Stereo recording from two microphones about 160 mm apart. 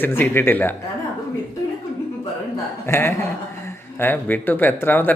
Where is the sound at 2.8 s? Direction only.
15° left (ahead or behind).